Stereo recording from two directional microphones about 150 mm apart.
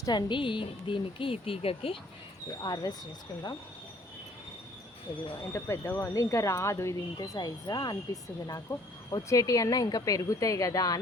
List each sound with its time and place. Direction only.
0.0 s speech: 30° left (ahead or behind)
2.5 s speech: 25° left (ahead or behind)
5.5 s speech: 15° left (ahead or behind)